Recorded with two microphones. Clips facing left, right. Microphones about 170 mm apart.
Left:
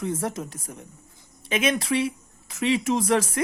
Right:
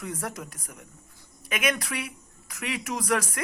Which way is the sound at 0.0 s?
25° left (ahead or behind).